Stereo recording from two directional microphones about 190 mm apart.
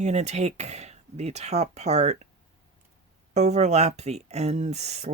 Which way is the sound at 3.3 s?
35° right (ahead or behind).